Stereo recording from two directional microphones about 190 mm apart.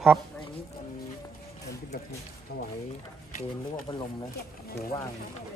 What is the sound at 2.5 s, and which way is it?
Speech, 55° left (ahead or behind).